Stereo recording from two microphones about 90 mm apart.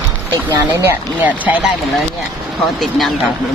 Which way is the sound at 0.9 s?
15° right (ahead or behind).